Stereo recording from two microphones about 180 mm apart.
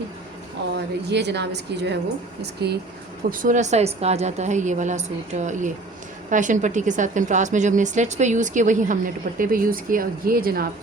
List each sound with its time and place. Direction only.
0.6 s a woman's voice: 80° right
3.2 s a woman's voice: 50° right (ahead or behind)